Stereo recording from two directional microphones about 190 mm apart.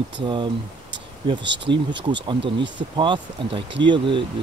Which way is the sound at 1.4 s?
70° right (ahead or behind).